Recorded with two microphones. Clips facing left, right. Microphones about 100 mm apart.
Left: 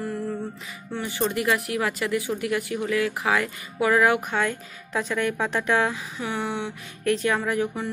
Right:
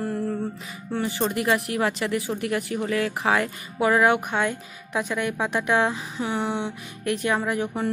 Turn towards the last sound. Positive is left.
turn(degrees=-20)  # may be behind; listen again after turning